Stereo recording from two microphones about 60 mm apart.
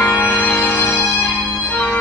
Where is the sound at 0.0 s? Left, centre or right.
Left.